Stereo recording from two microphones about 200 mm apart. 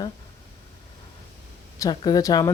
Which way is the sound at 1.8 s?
20° left (ahead or behind).